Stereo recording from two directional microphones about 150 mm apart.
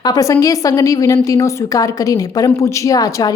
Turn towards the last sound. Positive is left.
turn(degrees=25)  # may be behind; listen again after turning